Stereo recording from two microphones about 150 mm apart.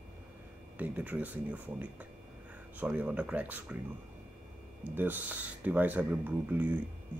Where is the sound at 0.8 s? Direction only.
10° right (ahead or behind).